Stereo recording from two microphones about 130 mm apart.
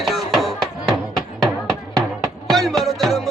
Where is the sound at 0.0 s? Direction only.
Centre (ahead or behind).